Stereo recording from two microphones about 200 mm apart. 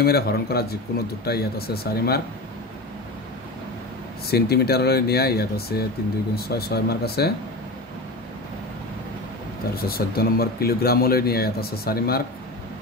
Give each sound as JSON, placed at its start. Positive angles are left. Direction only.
{"t": 0.0, "sound": "speech", "side_deg": 50}
{"t": 4.3, "sound": "speech", "side_deg": 50}
{"t": 9.8, "sound": "speech", "side_deg": 50}